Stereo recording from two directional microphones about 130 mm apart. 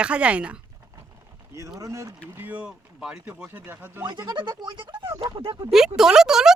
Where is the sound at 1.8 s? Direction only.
25° right (ahead or behind).